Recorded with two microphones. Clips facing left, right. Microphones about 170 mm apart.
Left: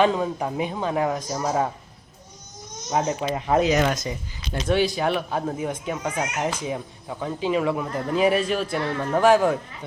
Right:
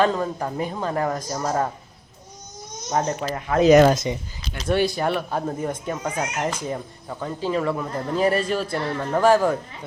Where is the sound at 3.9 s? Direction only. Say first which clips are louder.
Right 6 dB; 25° right (ahead or behind).